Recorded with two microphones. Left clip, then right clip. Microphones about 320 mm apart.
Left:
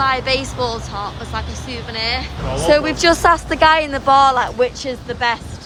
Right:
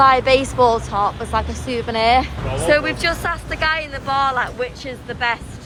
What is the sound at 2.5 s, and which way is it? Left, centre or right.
Speech, centre.